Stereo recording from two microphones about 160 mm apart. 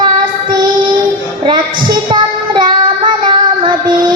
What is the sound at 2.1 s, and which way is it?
Child singing, 30° right (ahead or behind).